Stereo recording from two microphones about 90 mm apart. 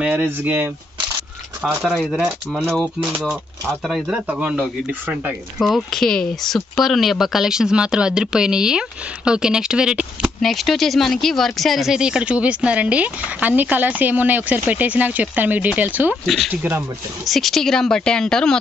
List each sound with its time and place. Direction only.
0.0 s speech: 15° right (ahead or behind)
1.9 s speech: centre (ahead or behind)
4.3 s speech: 15° right (ahead or behind)
5.6 s speech: 5° left (ahead or behind)
10.4 s speech: centre (ahead or behind); by 16.2 s 20° right (ahead or behind)
17.3 s speech: centre (ahead or behind)